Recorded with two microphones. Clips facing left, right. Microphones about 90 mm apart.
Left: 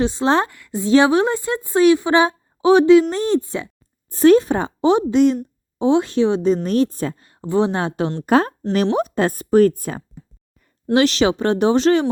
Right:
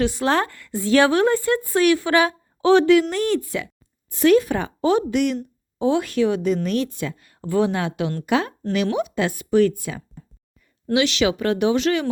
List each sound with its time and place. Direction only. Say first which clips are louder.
0.0 s a woman's voice: left 3 dB; 25° left (ahead or behind); by 7.3 s 40° left (ahead or behind)
7.3 s a woman's voice: left 1 dB; 25° left (ahead or behind)